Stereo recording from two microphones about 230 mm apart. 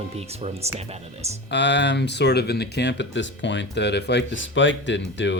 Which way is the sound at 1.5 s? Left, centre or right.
Left.